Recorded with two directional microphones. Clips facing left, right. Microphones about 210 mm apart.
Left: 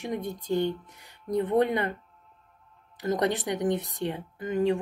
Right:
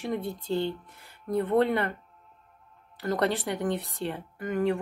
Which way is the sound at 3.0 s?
20° left (ahead or behind).